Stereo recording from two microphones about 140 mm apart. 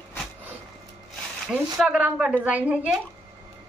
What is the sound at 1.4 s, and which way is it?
A woman's voice, 5° right (ahead or behind).